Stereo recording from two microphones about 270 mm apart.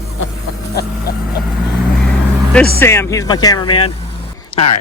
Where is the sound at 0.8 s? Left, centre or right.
Left.